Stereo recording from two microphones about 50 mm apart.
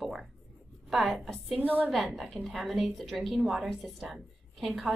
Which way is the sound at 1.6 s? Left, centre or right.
Right.